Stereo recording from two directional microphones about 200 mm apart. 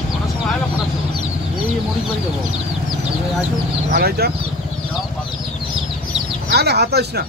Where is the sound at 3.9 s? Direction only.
50° right (ahead or behind).